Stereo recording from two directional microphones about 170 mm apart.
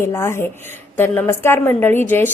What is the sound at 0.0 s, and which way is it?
A woman's voice, 15° left (ahead or behind).